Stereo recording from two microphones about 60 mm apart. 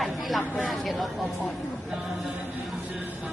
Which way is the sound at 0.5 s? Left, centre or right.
Centre.